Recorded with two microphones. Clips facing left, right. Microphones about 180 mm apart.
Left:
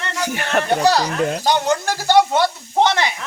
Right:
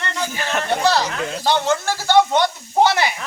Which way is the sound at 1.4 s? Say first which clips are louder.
Right 3 dB; 15° left (ahead or behind).